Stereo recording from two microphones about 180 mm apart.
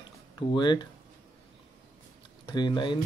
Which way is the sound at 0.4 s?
25° left (ahead or behind).